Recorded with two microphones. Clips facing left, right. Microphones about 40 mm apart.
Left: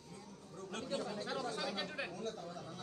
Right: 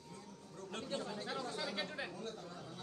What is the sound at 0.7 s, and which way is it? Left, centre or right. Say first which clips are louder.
Chatter: left 2 dB; right.